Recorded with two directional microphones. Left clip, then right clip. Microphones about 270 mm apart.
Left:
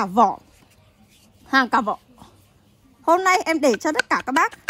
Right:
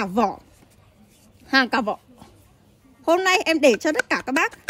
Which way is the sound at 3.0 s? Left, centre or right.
Centre.